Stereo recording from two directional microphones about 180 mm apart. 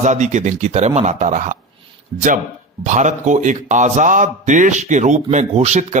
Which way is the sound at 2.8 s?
40° right (ahead or behind).